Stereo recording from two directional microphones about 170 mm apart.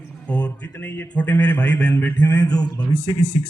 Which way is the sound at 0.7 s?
10° left (ahead or behind).